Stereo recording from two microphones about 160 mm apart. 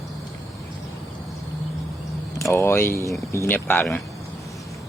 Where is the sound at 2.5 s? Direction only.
15° left (ahead or behind).